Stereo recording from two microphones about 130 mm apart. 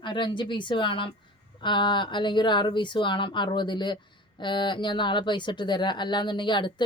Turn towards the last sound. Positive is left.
turn(degrees=35)  # may be behind; listen again after turning